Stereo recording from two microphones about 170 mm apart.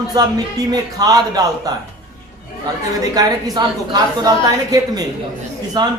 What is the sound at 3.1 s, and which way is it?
Speech, 20° right (ahead or behind).